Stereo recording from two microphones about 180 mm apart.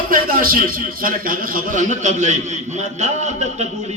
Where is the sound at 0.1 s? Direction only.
50° right (ahead or behind).